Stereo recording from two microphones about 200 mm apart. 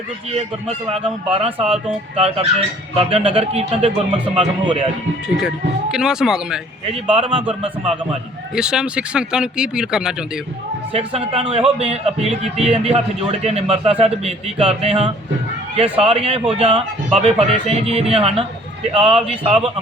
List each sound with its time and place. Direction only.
1.0 s speech: 30° right (ahead or behind)
5.4 s speech: centre (ahead or behind)
6.8 s speech: 30° right (ahead or behind)
8.5 s speech: 5° right (ahead or behind)
10.9 s a man's voice: 30° right (ahead or behind)